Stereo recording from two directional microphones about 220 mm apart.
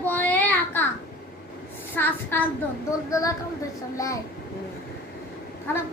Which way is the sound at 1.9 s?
10° left (ahead or behind).